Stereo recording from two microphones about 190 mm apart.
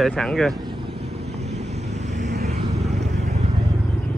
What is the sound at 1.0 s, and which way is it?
Vehicle, 60° right (ahead or behind).